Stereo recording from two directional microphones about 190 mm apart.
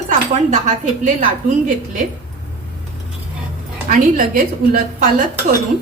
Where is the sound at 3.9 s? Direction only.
45° right (ahead or behind).